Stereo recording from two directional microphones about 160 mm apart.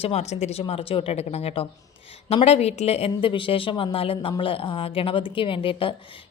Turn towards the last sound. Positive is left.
turn(degrees=35)  # may be behind; listen again after turning